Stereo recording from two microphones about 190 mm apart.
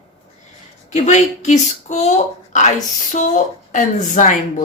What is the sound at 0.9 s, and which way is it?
Speech, 40° left (ahead or behind).